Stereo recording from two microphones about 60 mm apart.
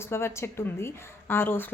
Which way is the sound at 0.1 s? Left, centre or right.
Left.